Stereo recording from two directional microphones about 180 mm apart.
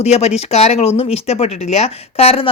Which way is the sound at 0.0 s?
35° left (ahead or behind).